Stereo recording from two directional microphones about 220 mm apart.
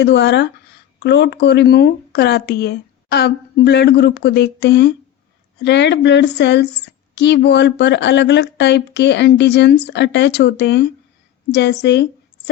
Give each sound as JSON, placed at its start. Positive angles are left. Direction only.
{"t": 0.0, "sound": "speech", "side_deg": 50}